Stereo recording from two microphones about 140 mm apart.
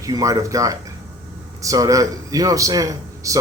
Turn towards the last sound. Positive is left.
turn(degrees=-25)  # may be behind; listen again after turning